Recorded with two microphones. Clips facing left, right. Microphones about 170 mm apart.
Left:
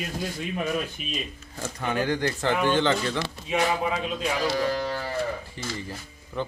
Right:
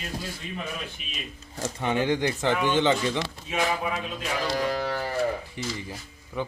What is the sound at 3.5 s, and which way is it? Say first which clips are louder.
Speech: left 3 dB; 20° left (ahead or behind).